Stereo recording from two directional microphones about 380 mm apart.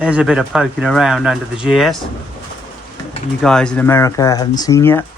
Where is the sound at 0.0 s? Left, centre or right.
Centre.